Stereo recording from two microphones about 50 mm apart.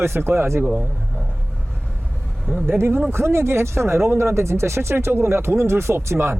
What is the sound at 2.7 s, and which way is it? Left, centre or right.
Speech, right.